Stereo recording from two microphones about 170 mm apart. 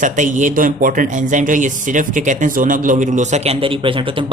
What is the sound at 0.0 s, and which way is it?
Speech, 50° right (ahead or behind).